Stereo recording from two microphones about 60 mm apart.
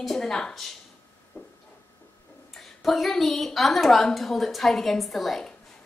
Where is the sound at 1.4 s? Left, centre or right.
Left.